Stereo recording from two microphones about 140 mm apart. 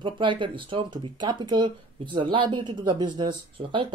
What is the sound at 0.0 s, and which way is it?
Speech, 35° right (ahead or behind).